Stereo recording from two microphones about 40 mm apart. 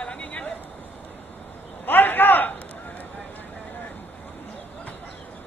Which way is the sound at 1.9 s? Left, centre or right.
Left.